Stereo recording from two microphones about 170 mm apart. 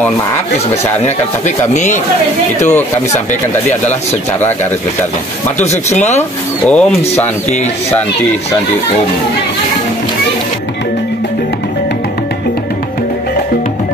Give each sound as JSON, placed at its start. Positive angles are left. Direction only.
{"t": 1.7, "sound": "speech", "side_deg": 45}
{"t": 5.6, "sound": "speech", "side_deg": 40}
{"t": 6.7, "sound": "speech", "side_deg": 5}